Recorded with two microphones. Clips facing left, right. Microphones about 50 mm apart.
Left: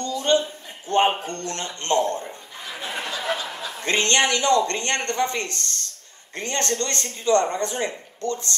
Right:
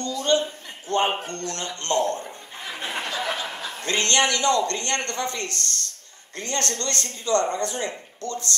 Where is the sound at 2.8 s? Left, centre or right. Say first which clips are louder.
Even; right.